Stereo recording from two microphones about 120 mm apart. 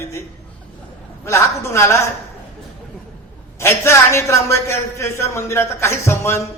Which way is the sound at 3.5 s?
20° left (ahead or behind).